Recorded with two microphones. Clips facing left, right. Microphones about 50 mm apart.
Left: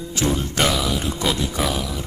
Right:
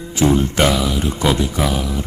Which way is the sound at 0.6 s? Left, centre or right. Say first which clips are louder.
Right 4 dB; centre.